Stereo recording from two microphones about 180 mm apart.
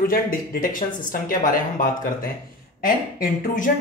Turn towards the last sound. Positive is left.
turn(degrees=50)  # may be behind; listen again after turning